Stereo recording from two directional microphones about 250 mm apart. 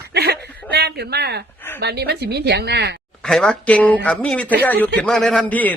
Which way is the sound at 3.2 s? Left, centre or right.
Centre.